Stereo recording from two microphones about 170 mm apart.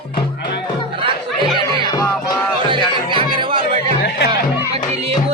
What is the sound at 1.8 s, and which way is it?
Music, 25° left (ahead or behind).